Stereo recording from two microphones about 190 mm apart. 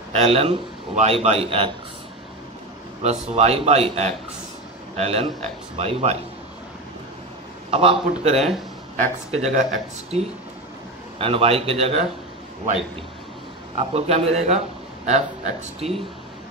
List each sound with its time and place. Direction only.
0.1 s a man's voice: 30° right (ahead or behind)
3.0 s a man's voice: 35° right (ahead or behind)
7.7 s a man's voice: 30° right (ahead or behind)
13.7 s a man's voice: 35° right (ahead or behind)